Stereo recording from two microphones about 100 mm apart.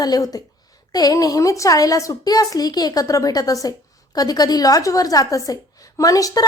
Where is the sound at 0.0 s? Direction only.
40° left (ahead or behind).